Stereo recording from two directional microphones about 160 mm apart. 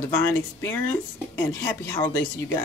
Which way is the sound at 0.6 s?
15° left (ahead or behind).